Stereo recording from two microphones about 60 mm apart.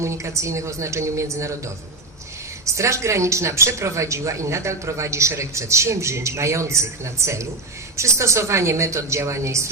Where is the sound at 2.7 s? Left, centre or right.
Right.